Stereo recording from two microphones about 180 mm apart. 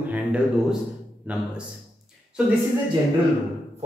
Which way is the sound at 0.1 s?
5° right (ahead or behind).